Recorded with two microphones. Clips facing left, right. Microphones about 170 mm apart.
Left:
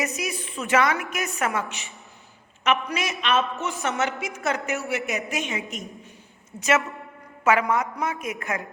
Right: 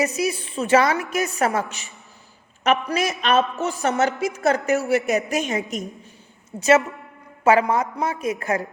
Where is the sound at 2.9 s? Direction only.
40° right (ahead or behind).